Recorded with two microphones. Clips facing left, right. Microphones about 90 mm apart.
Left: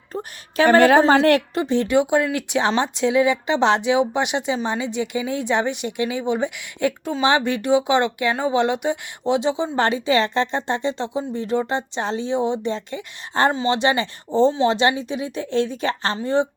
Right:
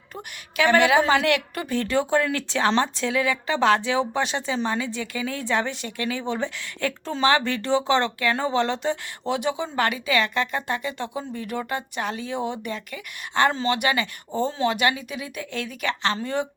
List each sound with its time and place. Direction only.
0.1 s a woman's voice: 35° left (ahead or behind)
1.5 s speech: 20° left (ahead or behind)